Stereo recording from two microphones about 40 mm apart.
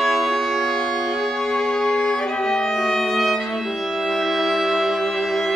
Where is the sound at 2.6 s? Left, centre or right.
Centre.